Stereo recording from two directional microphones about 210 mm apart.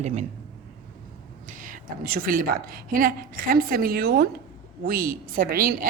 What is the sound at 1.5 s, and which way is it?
A woman's voice, 40° right (ahead or behind).